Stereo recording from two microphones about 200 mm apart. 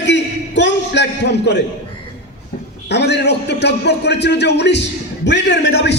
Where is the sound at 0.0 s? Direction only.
60° left (ahead or behind).